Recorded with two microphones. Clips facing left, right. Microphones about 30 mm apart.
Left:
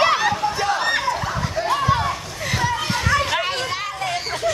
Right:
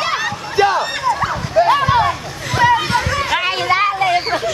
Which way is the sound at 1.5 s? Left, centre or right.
Right.